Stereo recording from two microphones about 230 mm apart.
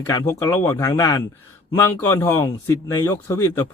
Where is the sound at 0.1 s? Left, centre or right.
Centre.